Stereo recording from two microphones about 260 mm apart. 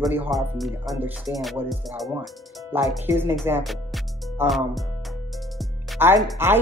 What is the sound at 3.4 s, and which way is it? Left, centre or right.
Music, centre.